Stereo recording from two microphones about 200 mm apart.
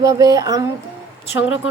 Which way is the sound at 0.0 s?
15° right (ahead or behind).